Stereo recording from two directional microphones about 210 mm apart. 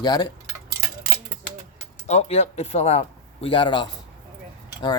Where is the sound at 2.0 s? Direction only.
30° left (ahead or behind).